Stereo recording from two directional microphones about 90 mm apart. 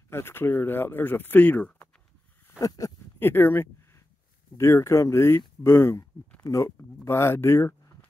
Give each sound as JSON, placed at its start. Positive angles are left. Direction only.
{"t": 0.1, "sound": "speech", "side_deg": 25}
{"t": 2.6, "sound": "speech", "side_deg": 40}
{"t": 3.2, "sound": "a sound", "side_deg": 25}
{"t": 4.6, "sound": "speech", "side_deg": 30}